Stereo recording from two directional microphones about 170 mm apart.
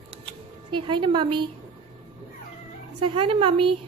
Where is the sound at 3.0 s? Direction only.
30° right (ahead or behind).